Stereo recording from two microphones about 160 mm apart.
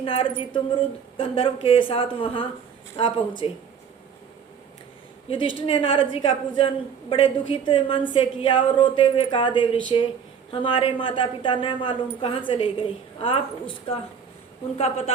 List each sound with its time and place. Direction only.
0.0 s a woman's voice: 35° left (ahead or behind)
5.3 s a woman's voice: 35° left (ahead or behind)